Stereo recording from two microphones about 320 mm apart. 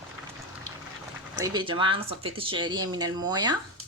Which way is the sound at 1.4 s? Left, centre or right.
Centre.